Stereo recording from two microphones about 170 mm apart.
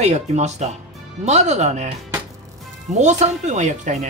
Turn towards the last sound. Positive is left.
turn(degrees=-45)  # may be behind; listen again after turning